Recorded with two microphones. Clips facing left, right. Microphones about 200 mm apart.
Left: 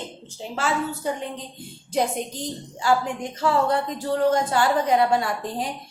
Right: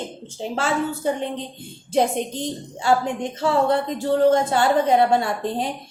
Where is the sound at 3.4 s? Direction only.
25° right (ahead or behind).